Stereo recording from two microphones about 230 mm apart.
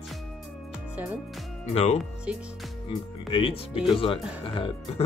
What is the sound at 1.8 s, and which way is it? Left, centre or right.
Speech, left.